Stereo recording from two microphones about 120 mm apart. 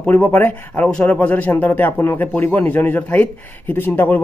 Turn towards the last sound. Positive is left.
turn(degrees=15)  # may be behind; listen again after turning